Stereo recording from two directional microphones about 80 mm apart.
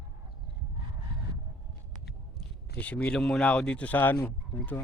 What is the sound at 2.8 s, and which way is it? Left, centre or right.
Speech, centre.